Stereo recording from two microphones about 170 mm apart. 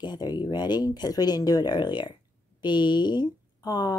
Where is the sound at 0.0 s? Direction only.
25° left (ahead or behind).